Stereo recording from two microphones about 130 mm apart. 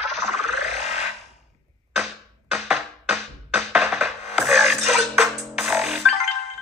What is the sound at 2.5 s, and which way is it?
Music, centre (ahead or behind).